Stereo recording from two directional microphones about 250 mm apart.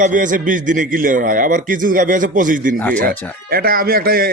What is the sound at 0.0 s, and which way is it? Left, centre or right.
Speech, right.